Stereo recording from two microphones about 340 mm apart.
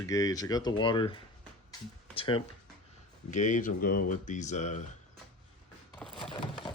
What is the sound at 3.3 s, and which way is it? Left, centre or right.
Speech, left.